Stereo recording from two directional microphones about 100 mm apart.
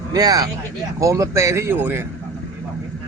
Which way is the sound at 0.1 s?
40° right (ahead or behind).